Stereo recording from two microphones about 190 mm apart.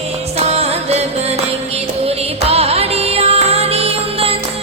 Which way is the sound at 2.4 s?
30° right (ahead or behind).